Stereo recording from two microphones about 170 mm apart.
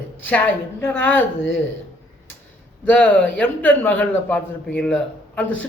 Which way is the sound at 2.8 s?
5° left (ahead or behind).